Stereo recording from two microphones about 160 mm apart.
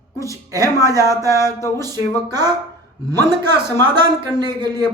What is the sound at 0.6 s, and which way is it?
Speech, 20° left (ahead or behind).